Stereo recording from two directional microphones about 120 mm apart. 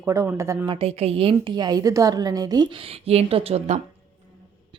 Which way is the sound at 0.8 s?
55° right (ahead or behind).